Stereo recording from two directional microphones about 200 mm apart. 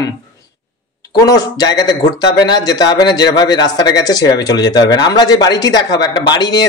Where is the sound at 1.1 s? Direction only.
20° left (ahead or behind).